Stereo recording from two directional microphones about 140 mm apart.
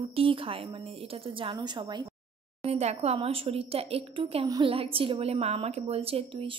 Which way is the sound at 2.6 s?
50° right (ahead or behind).